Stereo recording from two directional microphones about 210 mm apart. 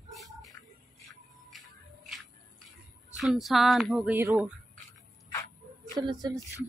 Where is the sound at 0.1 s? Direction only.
Centre (ahead or behind).